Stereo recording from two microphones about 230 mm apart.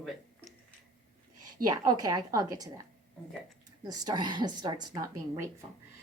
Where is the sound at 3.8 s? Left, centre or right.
Centre.